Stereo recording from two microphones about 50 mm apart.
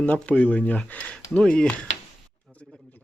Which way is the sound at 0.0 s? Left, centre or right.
Left.